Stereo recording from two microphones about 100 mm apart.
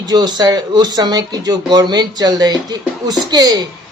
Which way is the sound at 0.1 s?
45° right (ahead or behind).